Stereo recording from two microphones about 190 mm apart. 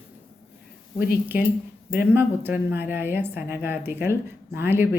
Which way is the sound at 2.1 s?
10° right (ahead or behind).